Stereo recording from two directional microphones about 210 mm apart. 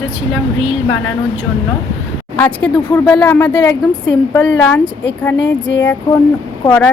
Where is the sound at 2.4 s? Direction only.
5° left (ahead or behind).